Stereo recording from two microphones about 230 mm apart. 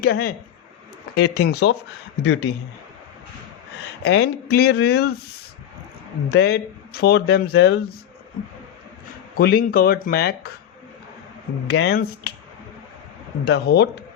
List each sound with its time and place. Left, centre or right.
0.0 s speech: left
4.0 s speech: left
6.2 s speech: left
9.3 s speech: left
11.7 s speech: left
13.4 s speech: left